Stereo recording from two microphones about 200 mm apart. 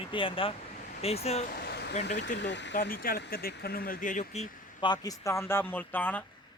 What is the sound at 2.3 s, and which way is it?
Speech, 60° left (ahead or behind).